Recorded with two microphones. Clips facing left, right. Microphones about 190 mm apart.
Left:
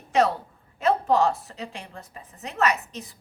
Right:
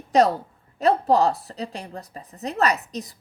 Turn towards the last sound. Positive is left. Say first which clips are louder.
# right 2 dB
turn(degrees=-35)  # may be behind; listen again after turning